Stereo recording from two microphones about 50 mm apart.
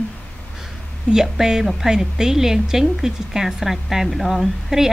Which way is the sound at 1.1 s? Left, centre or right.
Centre.